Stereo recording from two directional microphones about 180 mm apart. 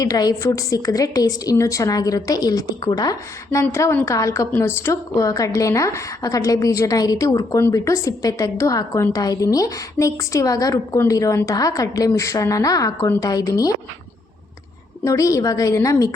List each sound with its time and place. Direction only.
0.0 s a woman's voice: 20° left (ahead or behind)
15.0 s a woman's voice: 20° left (ahead or behind)